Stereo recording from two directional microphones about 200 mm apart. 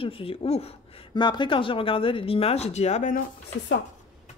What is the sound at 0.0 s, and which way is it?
Speech, 25° left (ahead or behind).